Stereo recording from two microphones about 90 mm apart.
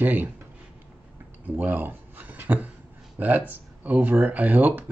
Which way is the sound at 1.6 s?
20° right (ahead or behind).